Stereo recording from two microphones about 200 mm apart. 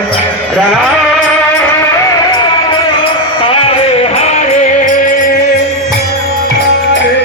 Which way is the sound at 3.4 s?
30° left (ahead or behind).